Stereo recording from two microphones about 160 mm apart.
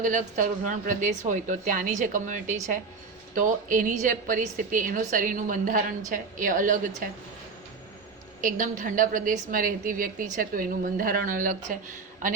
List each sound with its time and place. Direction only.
0.0 s a woman's voice: 55° right (ahead or behind)
8.4 s a woman's voice: 55° right (ahead or behind)